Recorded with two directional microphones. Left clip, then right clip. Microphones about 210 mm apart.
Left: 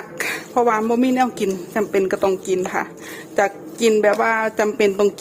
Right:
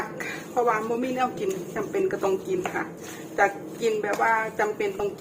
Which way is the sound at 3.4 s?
55° left (ahead or behind).